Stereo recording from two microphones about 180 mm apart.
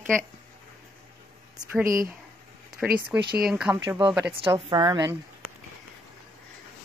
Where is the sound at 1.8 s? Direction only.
50° right (ahead or behind).